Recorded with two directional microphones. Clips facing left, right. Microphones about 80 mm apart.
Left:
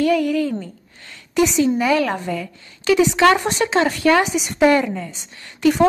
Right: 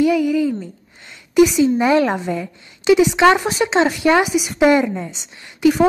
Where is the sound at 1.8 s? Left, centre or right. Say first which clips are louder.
Right 3 dB; right.